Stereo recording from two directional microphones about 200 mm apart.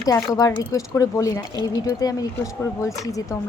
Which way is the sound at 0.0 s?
15° left (ahead or behind).